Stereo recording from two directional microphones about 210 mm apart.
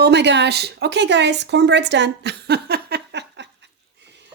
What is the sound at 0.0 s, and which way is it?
Speech, 55° right (ahead or behind).